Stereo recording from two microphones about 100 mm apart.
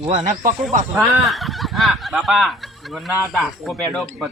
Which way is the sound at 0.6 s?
Centre (ahead or behind).